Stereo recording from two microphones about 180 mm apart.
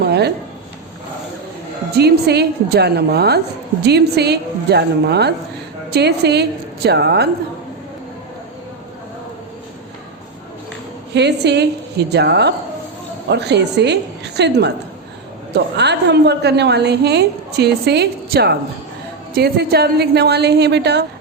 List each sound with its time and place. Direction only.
0.0 s a sound: 65° right (ahead or behind)
2.0 s a woman's voice: 65° right (ahead or behind)
11.1 s a woman's voice: 70° right (ahead or behind)